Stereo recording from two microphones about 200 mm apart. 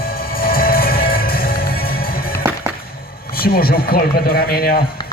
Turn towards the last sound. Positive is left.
turn(degrees=50)  # may be behind; listen again after turning